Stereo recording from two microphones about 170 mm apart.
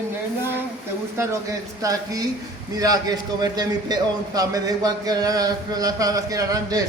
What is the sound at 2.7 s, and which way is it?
Speech, 20° right (ahead or behind).